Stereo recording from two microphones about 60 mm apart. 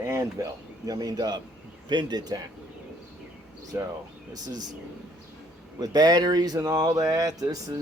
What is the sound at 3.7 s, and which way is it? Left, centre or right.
Speech, right.